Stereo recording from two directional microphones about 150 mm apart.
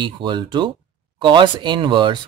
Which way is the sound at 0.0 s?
30° right (ahead or behind).